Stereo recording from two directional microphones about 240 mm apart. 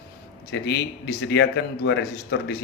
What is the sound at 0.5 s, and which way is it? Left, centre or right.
Speech, left.